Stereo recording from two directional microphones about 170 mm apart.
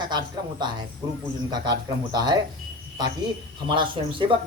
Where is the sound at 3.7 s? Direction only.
30° right (ahead or behind).